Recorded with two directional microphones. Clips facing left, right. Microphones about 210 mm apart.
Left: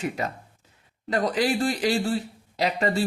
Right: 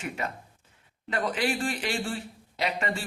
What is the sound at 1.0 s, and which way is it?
Speech, 40° left (ahead or behind).